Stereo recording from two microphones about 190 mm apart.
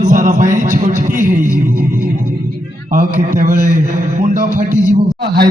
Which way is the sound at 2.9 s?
45° right (ahead or behind).